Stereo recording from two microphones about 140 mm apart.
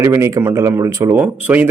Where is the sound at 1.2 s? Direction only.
10° right (ahead or behind).